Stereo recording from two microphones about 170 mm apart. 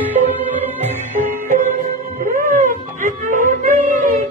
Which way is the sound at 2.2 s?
45° right (ahead or behind).